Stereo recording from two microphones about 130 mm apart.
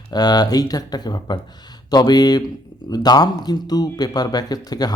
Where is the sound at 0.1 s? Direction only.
30° left (ahead or behind).